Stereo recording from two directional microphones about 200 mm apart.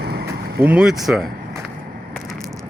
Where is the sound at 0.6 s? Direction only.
5° right (ahead or behind).